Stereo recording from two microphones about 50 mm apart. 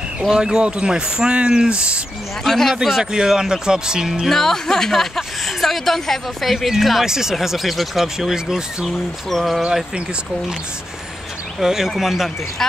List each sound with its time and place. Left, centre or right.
0.3 s speech: centre
2.4 s speech: centre
4.3 s a woman's voice: centre
11.6 s a woman's voice: centre